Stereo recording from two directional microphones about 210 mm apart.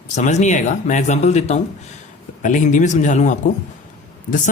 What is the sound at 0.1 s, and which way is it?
Speech, 35° left (ahead or behind).